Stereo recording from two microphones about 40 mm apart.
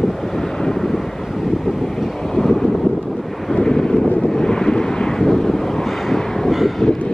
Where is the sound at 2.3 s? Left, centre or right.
Centre.